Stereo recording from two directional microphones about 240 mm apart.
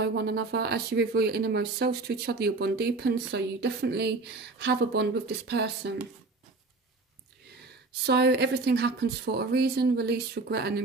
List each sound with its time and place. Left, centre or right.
0.0 s speech: right
8.0 s speech: right